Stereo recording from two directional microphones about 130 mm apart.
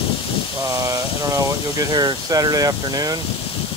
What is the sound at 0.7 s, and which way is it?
Speech, 25° right (ahead or behind).